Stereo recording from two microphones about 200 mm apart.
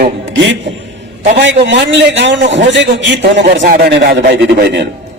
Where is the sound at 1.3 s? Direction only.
60° right (ahead or behind).